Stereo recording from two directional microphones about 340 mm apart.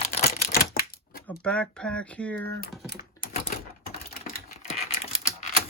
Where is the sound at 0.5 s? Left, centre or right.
Left.